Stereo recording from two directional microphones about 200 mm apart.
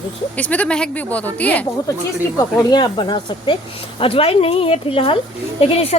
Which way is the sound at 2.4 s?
20° left (ahead or behind).